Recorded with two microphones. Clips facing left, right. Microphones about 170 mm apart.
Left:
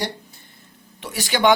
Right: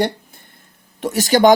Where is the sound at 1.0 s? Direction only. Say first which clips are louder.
Right 6 dB; 45° right (ahead or behind).